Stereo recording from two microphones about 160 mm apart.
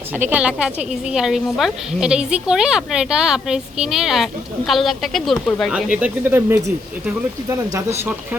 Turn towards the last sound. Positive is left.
turn(degrees=-20)  # may be behind; listen again after turning